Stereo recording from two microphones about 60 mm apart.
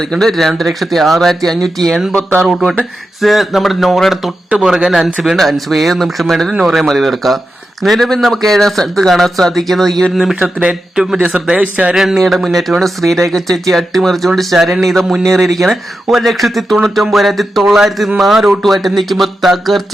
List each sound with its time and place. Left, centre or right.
0.1 s speech: centre
10.4 s a man's voice: centre
11.5 s speech: right
11.9 s speech: centre